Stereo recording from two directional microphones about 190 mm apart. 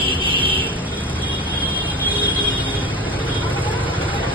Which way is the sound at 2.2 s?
10° right (ahead or behind).